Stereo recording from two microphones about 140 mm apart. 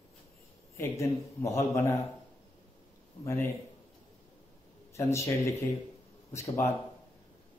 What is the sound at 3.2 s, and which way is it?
Speech, 20° left (ahead or behind).